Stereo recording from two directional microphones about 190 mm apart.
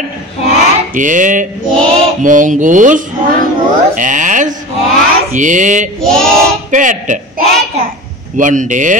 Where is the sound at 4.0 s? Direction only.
40° right (ahead or behind).